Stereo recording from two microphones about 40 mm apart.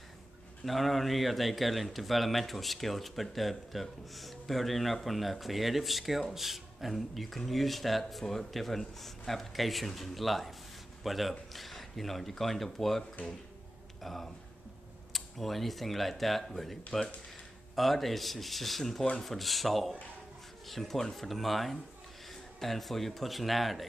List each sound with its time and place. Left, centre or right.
0.7 s speech: centre
14.0 s speech: centre
17.7 s a man's voice: centre